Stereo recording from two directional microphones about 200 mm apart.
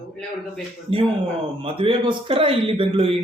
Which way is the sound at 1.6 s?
25° right (ahead or behind).